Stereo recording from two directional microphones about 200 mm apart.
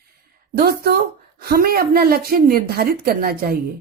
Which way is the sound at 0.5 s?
50° right (ahead or behind).